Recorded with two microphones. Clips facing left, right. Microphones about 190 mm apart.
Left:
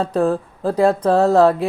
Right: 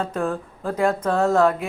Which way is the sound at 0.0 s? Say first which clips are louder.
Left 7 dB; 35° left (ahead or behind).